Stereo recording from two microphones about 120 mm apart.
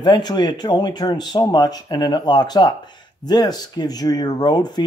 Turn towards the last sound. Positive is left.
turn(degrees=35)  # may be behind; listen again after turning